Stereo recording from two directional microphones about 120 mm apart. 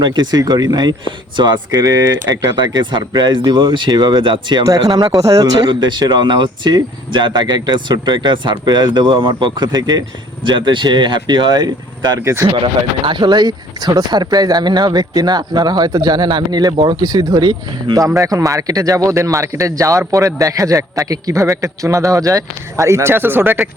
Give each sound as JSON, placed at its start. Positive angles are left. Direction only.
{"t": 0.0, "sound": "speech", "side_deg": -35}
{"t": 4.6, "sound": "speech", "side_deg": -30}
{"t": 12.2, "sound": "speech", "side_deg": -25}
{"t": 12.6, "sound": "speech", "side_deg": -40}